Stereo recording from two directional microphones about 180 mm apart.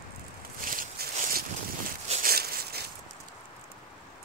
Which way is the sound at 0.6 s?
50° right (ahead or behind).